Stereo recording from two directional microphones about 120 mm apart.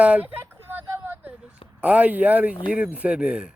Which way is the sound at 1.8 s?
10° right (ahead or behind).